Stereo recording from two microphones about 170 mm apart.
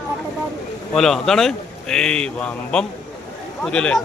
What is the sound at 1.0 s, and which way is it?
A man's voice, centre (ahead or behind).